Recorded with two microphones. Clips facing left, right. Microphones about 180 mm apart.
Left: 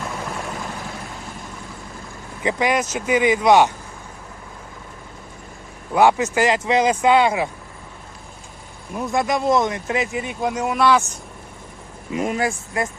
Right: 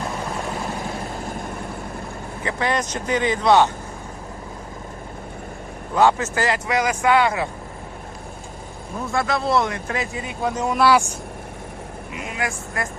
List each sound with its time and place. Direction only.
2.4 s speech: 15° left (ahead or behind)
5.9 s speech: 10° left (ahead or behind)
9.1 s speech: 15° left (ahead or behind)
10.8 s speech: 10° right (ahead or behind)
12.2 s speech: 45° left (ahead or behind)
12.5 s speech: 20° left (ahead or behind)